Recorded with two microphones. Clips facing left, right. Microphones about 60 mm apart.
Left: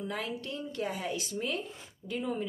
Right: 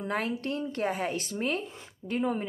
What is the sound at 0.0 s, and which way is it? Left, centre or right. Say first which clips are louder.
A woman's voice: right 5 dB; right.